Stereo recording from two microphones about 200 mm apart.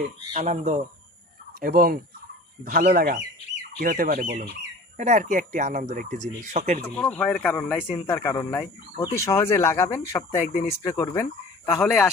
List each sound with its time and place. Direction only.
0.3 s speech: 40° right (ahead or behind)
6.8 s speech: 5° left (ahead or behind)